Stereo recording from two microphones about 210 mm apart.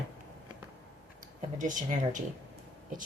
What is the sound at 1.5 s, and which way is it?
Speech, 35° right (ahead or behind).